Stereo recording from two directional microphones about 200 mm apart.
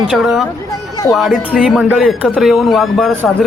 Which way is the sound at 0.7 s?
15° left (ahead or behind).